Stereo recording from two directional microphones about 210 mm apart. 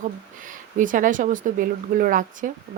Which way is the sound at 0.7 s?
40° right (ahead or behind).